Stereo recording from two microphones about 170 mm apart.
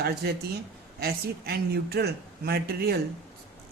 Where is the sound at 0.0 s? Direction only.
70° right (ahead or behind).